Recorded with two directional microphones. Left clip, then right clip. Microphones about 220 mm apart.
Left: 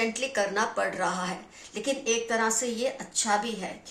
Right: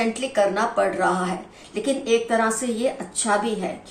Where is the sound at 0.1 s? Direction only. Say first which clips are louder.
Right 7 dB; 40° left (ahead or behind).